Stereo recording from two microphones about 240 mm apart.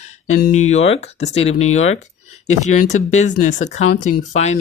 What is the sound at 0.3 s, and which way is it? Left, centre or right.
Speech, left.